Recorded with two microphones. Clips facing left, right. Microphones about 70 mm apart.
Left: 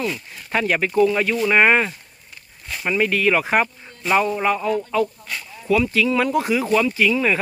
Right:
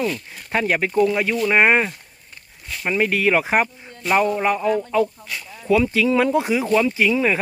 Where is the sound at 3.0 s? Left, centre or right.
Right.